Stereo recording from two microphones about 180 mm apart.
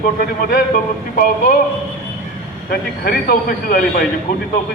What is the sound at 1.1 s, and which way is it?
Speech, 45° left (ahead or behind).